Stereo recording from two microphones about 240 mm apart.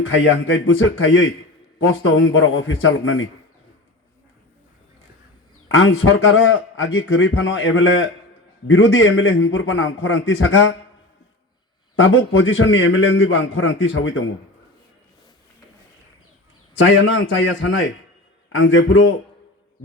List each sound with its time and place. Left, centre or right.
0.0 s a man's voice: left
5.6 s a man's voice: left
11.9 s a man's voice: left
16.7 s a man's voice: left